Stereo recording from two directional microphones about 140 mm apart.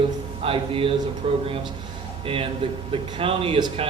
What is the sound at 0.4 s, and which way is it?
Speech, 40° right (ahead or behind).